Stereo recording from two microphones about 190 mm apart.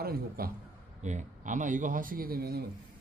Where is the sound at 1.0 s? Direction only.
40° right (ahead or behind); by 2.6 s 55° right (ahead or behind).